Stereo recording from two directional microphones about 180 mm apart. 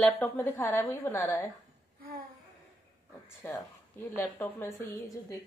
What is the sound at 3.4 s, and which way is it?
A woman's voice, 20° left (ahead or behind).